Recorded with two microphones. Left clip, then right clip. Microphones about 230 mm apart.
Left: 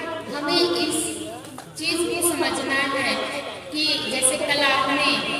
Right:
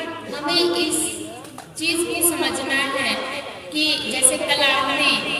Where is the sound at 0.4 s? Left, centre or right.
Right.